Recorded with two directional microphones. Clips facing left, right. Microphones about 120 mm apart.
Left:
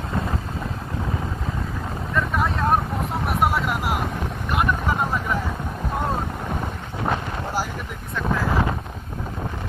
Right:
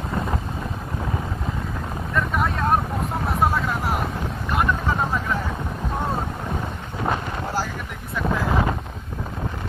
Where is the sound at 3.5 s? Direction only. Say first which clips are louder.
Even; 15° left (ahead or behind).